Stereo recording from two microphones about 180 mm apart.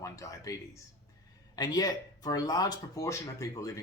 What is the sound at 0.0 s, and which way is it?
Speech, 20° left (ahead or behind).